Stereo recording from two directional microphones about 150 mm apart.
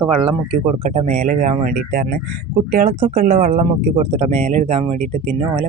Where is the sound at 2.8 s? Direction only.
60° right (ahead or behind).